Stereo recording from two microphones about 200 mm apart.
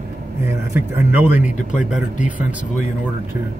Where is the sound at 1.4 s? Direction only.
40° left (ahead or behind).